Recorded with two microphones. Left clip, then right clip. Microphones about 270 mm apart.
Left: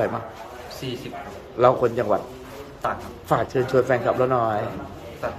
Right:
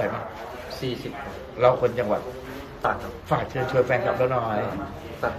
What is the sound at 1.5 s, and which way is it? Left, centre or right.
Speech, left.